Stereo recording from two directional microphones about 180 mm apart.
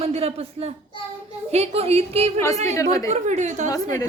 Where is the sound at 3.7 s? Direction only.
15° left (ahead or behind).